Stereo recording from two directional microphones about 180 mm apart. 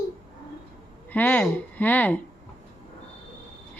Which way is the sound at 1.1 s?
10° left (ahead or behind).